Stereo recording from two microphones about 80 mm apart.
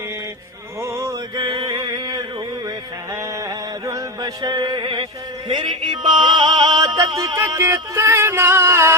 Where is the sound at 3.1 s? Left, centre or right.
Right.